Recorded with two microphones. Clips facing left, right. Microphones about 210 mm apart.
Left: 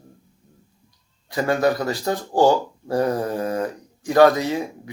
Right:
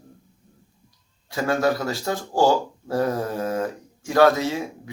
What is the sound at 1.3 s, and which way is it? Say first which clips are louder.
Speech: left 2 dB; centre (ahead or behind).